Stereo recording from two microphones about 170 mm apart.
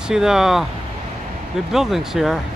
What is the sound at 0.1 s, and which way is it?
Speech, 5° right (ahead or behind).